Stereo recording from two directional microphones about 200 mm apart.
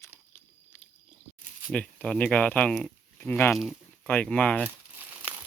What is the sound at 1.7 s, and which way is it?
Speech, 5° left (ahead or behind).